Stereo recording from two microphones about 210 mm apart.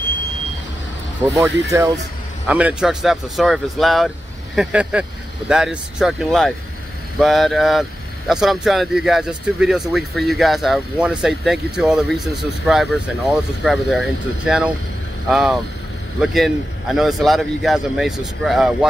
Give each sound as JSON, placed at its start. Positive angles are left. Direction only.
{"t": 1.3, "sound": "speech", "side_deg": -15}